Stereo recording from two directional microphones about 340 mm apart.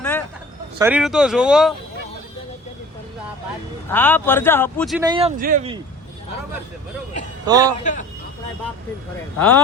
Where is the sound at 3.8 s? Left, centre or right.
Centre.